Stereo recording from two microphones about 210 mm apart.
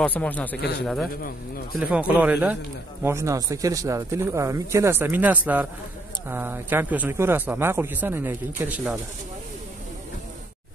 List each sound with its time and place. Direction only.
0.0 s speech: 5° left (ahead or behind)
0.6 s a man's voice: 50° left (ahead or behind)
1.8 s speech: 5° right (ahead or behind)